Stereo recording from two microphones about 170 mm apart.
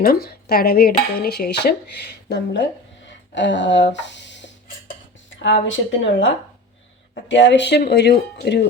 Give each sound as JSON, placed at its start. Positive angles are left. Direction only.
{"t": 0.0, "sound": "dishes", "side_deg": 60}
{"t": 5.6, "sound": "a woman's voice", "side_deg": 90}